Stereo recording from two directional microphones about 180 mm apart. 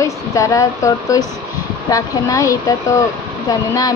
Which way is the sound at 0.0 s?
15° left (ahead or behind).